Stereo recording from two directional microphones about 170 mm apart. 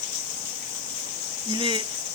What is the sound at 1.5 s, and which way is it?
Speech, 30° right (ahead or behind).